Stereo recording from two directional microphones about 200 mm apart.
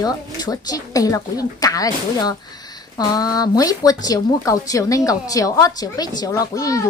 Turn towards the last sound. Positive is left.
turn(degrees=15)  # may be behind; listen again after turning